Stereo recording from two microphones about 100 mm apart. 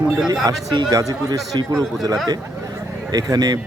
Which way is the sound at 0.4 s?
45° right (ahead or behind).